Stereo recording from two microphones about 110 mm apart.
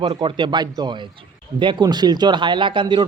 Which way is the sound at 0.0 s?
45° right (ahead or behind).